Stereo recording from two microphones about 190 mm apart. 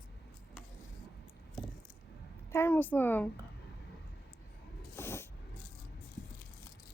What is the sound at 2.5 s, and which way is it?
Speech, 10° left (ahead or behind).